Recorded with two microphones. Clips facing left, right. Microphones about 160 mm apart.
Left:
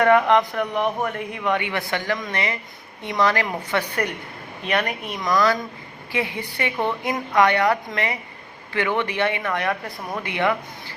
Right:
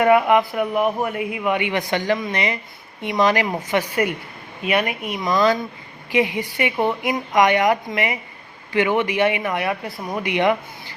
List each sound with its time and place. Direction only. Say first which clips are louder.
0.0 s speech: right 1 dB; 10° right (ahead or behind)
5.2 s speech: right 2 dB; 20° right (ahead or behind)